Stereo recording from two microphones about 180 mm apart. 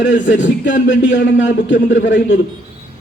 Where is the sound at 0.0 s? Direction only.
90° left.